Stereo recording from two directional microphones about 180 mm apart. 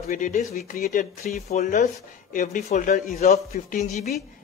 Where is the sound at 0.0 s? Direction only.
40° left (ahead or behind).